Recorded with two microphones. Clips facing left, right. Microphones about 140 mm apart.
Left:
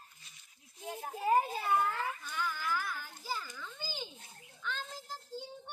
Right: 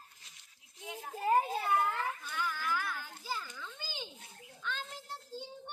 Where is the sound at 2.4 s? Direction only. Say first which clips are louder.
Even; 10° left (ahead or behind).